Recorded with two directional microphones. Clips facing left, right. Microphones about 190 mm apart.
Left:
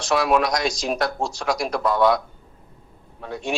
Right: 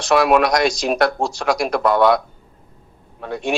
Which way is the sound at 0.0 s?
70° right (ahead or behind).